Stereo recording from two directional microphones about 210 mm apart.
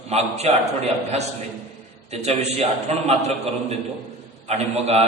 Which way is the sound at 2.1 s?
30° right (ahead or behind).